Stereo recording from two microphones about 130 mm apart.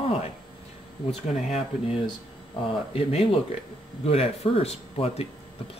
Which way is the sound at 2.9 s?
50° left (ahead or behind).